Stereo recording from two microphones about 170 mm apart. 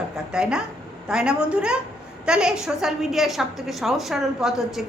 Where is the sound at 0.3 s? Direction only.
5° right (ahead or behind).